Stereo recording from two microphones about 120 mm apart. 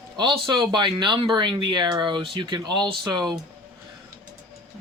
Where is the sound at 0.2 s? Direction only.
40° right (ahead or behind).